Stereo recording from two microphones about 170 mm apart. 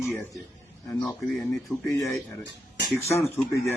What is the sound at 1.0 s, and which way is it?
Speech, 5° left (ahead or behind).